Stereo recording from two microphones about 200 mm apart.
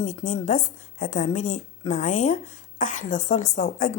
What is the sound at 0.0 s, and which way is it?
A woman's voice, 40° left (ahead or behind).